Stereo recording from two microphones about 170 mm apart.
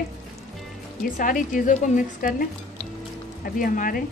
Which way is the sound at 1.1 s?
55° left (ahead or behind).